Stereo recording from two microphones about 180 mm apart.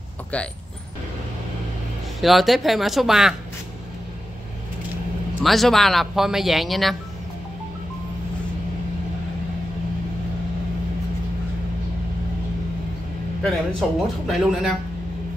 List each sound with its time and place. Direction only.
2.2 s speech: centre (ahead or behind)
5.4 s speech: centre (ahead or behind)
13.4 s speech: 5° left (ahead or behind)